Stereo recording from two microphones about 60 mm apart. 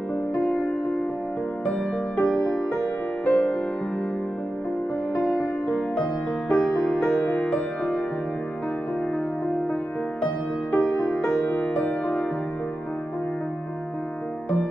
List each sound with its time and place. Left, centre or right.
0.3 s music: left
1.7 s music: centre
2.3 s music: centre
6.5 s music: centre
10.2 s music: left
10.9 s music: centre